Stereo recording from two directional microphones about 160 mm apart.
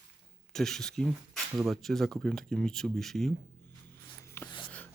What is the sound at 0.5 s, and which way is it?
Speech, 5° left (ahead or behind).